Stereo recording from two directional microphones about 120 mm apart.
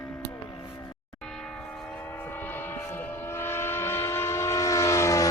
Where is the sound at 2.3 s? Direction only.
15° left (ahead or behind).